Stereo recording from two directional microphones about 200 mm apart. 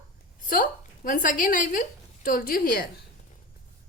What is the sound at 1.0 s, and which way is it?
A woman's voice, 45° left (ahead or behind).